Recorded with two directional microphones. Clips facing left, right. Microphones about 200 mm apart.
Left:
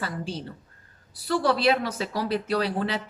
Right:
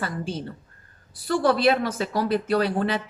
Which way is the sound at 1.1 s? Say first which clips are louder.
Right 2 dB; 50° right (ahead or behind).